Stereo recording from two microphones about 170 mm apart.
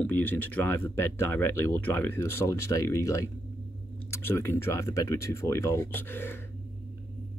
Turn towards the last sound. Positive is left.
turn(degrees=10)  # may be behind; listen again after turning